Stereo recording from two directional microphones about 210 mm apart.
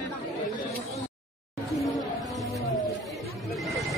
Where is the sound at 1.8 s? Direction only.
Centre (ahead or behind).